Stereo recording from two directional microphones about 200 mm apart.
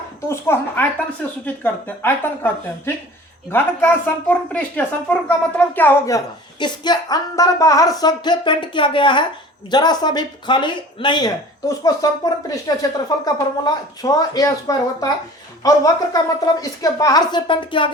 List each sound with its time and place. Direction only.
0.3 s a woman's voice: 10° left (ahead or behind)